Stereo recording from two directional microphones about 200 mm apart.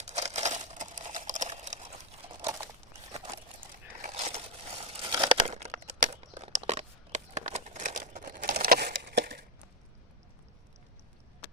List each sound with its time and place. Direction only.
0.0 s a sound: 35° right (ahead or behind)
2.3 s crumpling: 20° right (ahead or behind)
4.0 s crumpling: 30° right (ahead or behind); by 9.4 s 50° right (ahead or behind)